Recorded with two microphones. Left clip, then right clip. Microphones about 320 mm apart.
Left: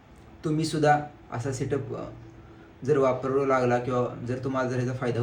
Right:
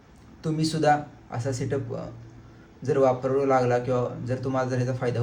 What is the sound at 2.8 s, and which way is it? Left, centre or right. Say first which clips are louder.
Speech: right 1 dB; centre.